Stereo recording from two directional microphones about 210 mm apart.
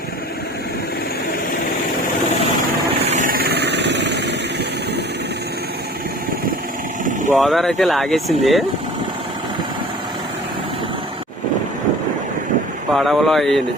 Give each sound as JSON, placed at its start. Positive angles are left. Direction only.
{"t": 3.1, "sound": "vehicle", "side_deg": -40}
{"t": 7.3, "sound": "speech", "side_deg": 0}
{"t": 12.9, "sound": "speech", "side_deg": 0}